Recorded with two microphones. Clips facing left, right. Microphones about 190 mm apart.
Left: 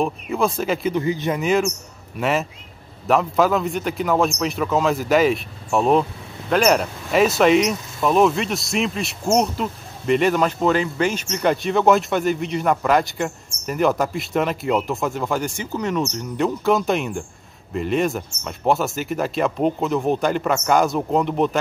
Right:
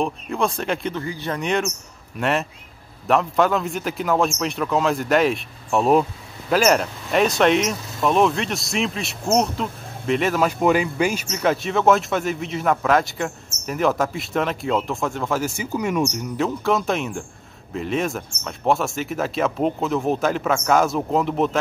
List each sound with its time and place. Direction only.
0.0 s speech: 5° left (ahead or behind)
0.9 s a man's voice: 20° left (ahead or behind)
1.4 s speech: centre (ahead or behind)
16.3 s speech: centre (ahead or behind)